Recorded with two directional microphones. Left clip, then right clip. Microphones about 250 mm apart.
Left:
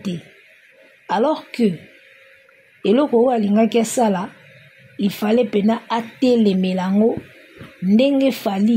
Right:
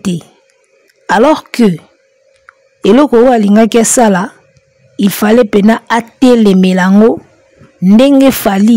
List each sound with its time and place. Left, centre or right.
1.0 s a man's voice: right
2.8 s a woman's voice: right